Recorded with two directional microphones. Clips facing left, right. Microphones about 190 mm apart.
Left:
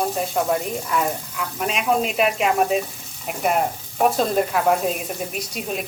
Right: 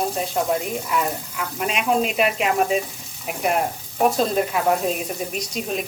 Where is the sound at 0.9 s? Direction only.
5° right (ahead or behind).